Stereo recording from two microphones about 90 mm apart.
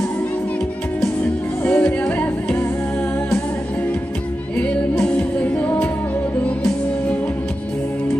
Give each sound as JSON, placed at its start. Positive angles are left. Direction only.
{"t": 1.6, "sound": "music", "side_deg": 20}
{"t": 5.0, "sound": "music", "side_deg": 15}